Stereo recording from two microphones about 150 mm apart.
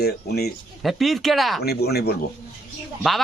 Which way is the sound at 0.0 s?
90° left.